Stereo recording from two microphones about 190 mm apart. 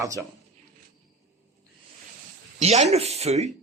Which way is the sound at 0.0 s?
15° right (ahead or behind).